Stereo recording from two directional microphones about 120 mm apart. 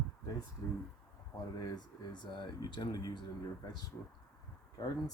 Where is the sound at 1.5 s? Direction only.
35° left (ahead or behind).